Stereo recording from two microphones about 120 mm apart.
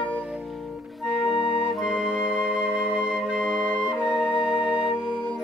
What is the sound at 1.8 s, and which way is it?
Music, 5° right (ahead or behind).